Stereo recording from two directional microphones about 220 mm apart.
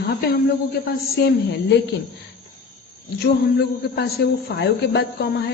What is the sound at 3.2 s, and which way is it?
Speech, 50° left (ahead or behind).